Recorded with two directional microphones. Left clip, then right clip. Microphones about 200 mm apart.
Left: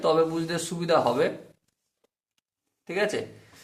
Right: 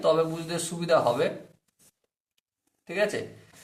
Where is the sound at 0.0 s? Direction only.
25° left (ahead or behind).